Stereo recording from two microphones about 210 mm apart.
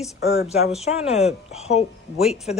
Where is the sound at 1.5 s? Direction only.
30° left (ahead or behind).